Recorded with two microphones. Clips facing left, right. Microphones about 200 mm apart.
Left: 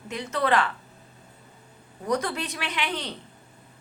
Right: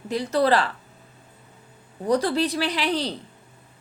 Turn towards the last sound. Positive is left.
turn(degrees=-35)  # may be behind; listen again after turning